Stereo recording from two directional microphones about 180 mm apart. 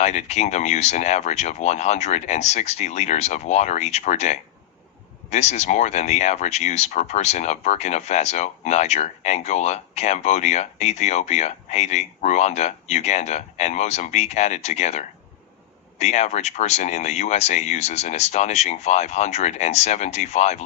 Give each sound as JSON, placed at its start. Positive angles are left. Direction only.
{"t": 0.0, "sound": "speech", "side_deg": 40}